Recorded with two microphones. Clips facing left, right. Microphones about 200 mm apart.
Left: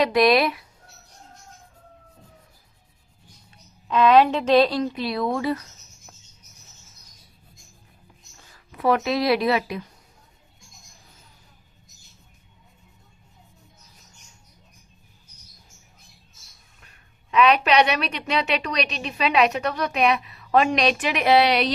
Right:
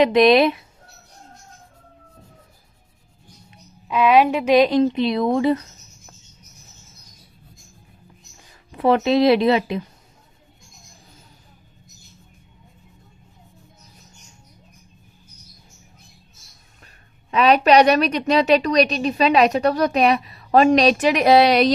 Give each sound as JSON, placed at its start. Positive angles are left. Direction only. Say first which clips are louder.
{"t": 0.0, "sound": "a woman's voice", "louder": "right 5 dB", "side_deg": -20}
{"t": 3.5, "sound": "a woman's voice", "louder": "even", "side_deg": -10}
{"t": 8.7, "sound": "a woman's voice", "louder": "right 5 dB", "side_deg": -25}
{"t": 17.3, "sound": "a woman's voice", "louder": "right 4 dB", "side_deg": -35}